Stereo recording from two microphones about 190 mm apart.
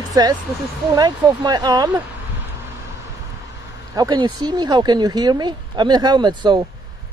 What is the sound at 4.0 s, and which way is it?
Speech, 20° right (ahead or behind).